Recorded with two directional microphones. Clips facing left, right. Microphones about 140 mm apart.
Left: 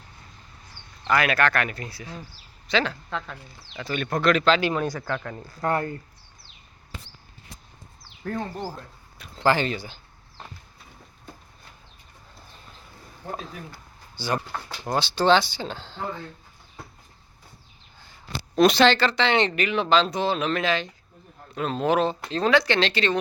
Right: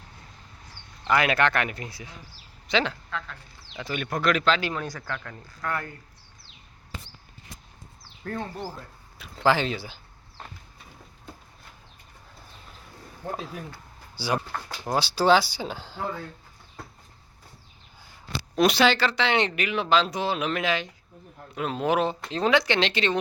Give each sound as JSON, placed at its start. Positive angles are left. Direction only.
{"t": 1.0, "sound": "speech", "side_deg": -20}
{"t": 3.1, "sound": "speech", "side_deg": 20}
{"t": 3.8, "sound": "speech", "side_deg": -15}
{"t": 4.6, "sound": "speech", "side_deg": 25}
{"t": 8.4, "sound": "speech", "side_deg": 10}
{"t": 8.7, "sound": "a sound", "side_deg": 0}
{"t": 13.3, "sound": "speech", "side_deg": -10}
{"t": 18.5, "sound": "speech", "side_deg": -10}